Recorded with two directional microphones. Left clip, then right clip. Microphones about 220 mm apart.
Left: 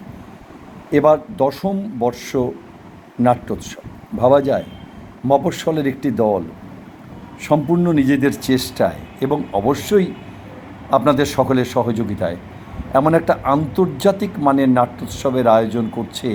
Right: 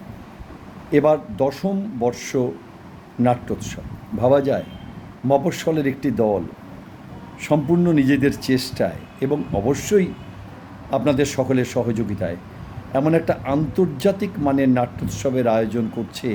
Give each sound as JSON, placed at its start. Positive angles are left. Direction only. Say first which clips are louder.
{"t": 0.9, "sound": "speech", "louder": "left 3 dB", "side_deg": -5}
{"t": 7.4, "sound": "speech", "louder": "left 2 dB", "side_deg": -5}